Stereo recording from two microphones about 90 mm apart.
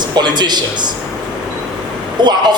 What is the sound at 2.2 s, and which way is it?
Speech, 55° right (ahead or behind).